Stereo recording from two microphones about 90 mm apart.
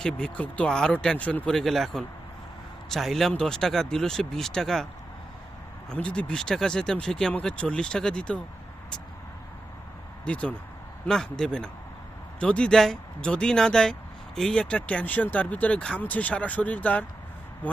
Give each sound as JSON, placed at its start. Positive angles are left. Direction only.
{"t": 0.0, "sound": "speech", "side_deg": 10}
{"t": 5.9, "sound": "speech", "side_deg": 10}
{"t": 10.2, "sound": "speech", "side_deg": 10}